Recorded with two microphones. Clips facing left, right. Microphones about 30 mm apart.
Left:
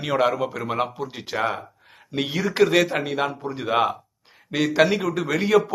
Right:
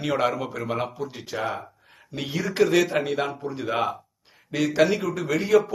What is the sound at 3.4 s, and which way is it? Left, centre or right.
Speech, centre.